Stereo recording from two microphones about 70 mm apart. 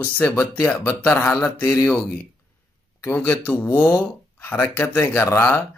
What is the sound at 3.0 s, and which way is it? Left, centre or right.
Speech, left.